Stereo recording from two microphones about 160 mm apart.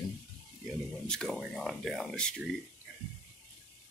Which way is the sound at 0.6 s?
5° left (ahead or behind).